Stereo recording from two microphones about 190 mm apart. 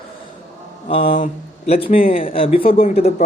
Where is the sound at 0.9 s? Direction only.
30° left (ahead or behind).